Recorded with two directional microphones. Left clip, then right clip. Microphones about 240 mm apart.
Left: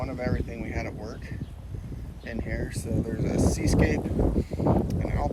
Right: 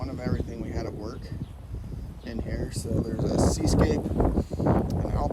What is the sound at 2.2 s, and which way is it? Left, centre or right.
Speech, centre.